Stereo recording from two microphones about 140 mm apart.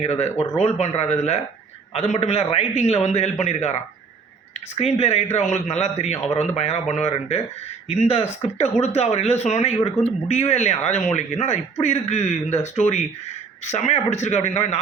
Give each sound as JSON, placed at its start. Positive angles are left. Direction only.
{"t": 0.0, "sound": "a man's voice", "side_deg": 50}